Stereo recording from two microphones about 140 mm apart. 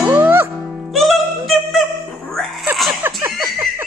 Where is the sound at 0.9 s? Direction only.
Centre (ahead or behind).